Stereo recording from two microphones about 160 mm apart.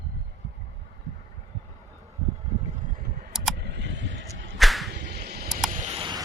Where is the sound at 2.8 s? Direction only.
60° right (ahead or behind).